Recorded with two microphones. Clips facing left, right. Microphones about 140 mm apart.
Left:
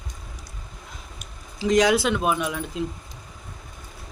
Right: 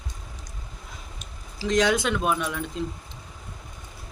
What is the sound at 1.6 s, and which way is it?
Speech, 10° left (ahead or behind).